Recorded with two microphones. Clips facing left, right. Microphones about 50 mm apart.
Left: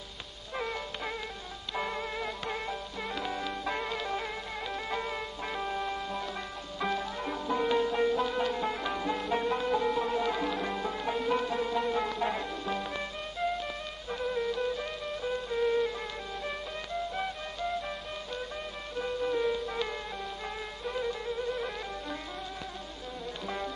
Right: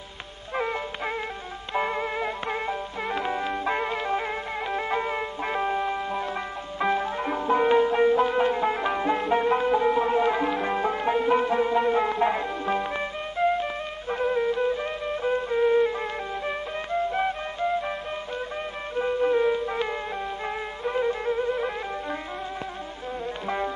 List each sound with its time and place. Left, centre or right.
0.6 s music: right
18.9 s music: right
23.4 s music: right